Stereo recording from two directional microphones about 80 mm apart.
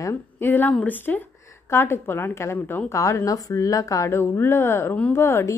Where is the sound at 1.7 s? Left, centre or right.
Left.